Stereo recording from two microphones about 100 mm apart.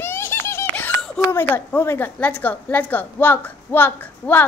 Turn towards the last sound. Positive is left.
turn(degrees=20)  # may be behind; listen again after turning